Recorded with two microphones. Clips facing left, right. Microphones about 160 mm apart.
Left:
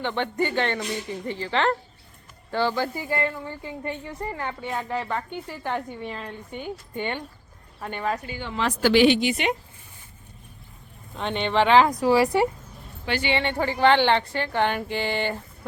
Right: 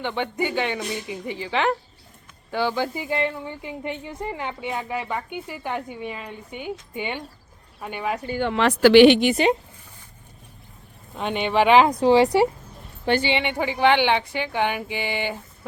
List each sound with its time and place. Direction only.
0.0 s speech: 10° right (ahead or behind)
8.4 s a woman's voice: 65° right (ahead or behind)
9.3 s speech: 35° right (ahead or behind)
11.2 s speech: 10° right (ahead or behind)